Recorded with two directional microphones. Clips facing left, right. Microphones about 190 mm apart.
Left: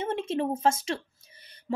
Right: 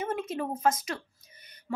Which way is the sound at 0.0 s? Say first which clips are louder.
Left 3 dB; 30° left (ahead or behind).